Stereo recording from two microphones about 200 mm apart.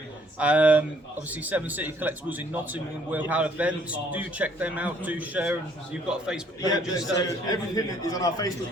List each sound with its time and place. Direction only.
0.3 s speech: 5° right (ahead or behind)
6.6 s a man's voice: 20° left (ahead or behind)